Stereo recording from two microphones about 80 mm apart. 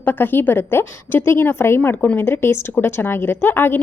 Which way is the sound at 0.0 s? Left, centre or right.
Left.